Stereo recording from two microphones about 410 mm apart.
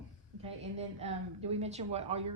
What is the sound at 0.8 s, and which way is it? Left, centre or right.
A woman's voice, centre.